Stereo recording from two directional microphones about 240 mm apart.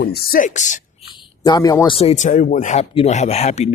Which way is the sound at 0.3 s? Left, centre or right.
Left.